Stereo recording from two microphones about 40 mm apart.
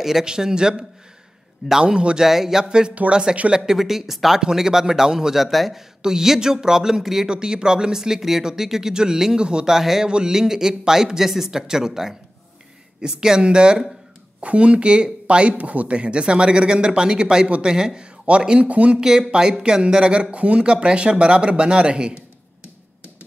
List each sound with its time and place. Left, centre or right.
0.2 s speech: centre
2.1 s speech: centre
3.1 s speech: right
3.5 s speech: centre
4.4 s speech: centre
5.4 s a man's voice: centre
6.0 s speech: centre
7.2 s speech: centre
8.2 s a man's voice: centre; by 9.8 s right
9.8 s speech: centre
10.0 s speech: right
18.7 s speech: right
18.9 s speech: centre